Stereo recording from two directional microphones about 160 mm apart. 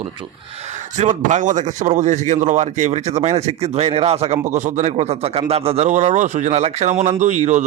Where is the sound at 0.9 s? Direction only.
50° right (ahead or behind).